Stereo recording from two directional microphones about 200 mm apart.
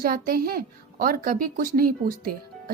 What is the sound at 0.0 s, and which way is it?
A child's voice, 45° right (ahead or behind).